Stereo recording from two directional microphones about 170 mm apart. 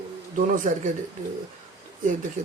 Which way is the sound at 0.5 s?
50° right (ahead or behind).